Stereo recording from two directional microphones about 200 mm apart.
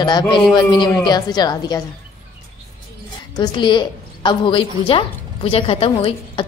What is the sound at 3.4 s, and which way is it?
A woman's voice, 20° left (ahead or behind).